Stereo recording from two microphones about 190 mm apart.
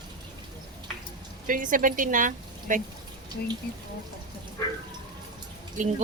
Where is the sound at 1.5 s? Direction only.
45° right (ahead or behind).